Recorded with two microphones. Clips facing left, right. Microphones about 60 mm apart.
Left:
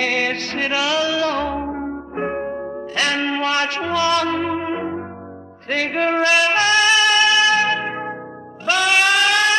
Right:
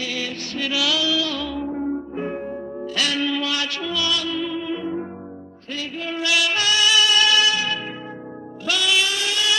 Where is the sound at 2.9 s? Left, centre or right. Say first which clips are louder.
Left 3 dB; left.